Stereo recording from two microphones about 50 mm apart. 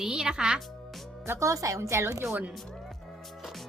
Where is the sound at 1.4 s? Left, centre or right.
Right.